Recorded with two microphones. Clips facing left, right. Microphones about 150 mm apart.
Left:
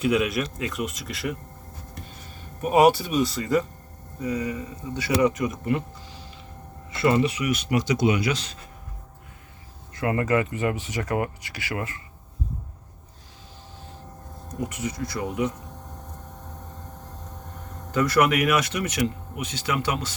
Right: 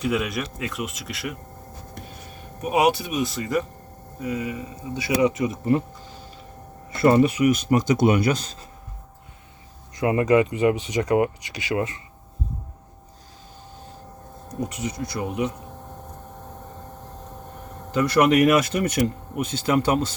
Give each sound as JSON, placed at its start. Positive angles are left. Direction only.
{"t": 0.0, "sound": "speech", "side_deg": 0}
{"t": 2.6, "sound": "speech", "side_deg": 0}
{"t": 4.9, "sound": "speech", "side_deg": -15}
{"t": 6.9, "sound": "speech", "side_deg": -50}
{"t": 9.9, "sound": "speech", "side_deg": -20}
{"t": 14.6, "sound": "speech", "side_deg": -20}
{"t": 17.9, "sound": "speech", "side_deg": -30}